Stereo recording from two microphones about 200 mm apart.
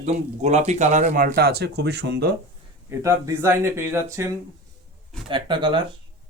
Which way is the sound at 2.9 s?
15° right (ahead or behind).